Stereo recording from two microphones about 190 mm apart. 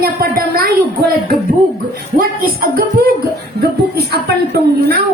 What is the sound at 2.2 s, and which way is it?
A woman's voice, 50° right (ahead or behind).